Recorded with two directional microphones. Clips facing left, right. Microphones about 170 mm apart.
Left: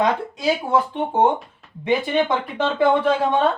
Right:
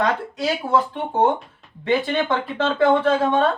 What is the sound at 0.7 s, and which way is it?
Speech, 15° left (ahead or behind).